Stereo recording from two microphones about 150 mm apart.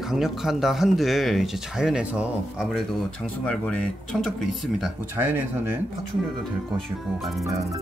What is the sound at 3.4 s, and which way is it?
Speech, 5° left (ahead or behind).